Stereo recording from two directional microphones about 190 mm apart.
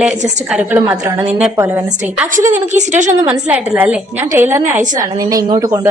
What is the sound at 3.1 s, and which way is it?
A woman's voice, 10° right (ahead or behind).